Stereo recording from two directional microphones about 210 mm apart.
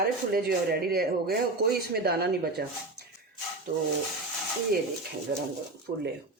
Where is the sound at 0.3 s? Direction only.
45° right (ahead or behind).